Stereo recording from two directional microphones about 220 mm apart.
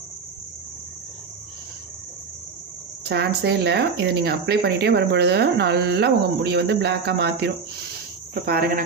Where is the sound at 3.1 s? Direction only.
50° right (ahead or behind).